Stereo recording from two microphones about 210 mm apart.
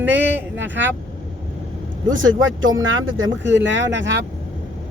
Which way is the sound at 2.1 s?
70° right (ahead or behind).